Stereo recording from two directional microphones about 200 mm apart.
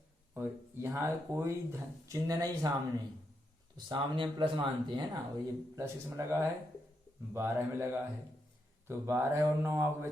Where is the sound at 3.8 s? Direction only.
25° right (ahead or behind).